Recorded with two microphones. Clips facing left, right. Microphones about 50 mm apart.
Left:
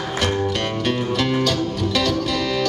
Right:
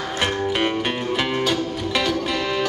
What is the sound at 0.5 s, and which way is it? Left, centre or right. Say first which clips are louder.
Music: even; centre.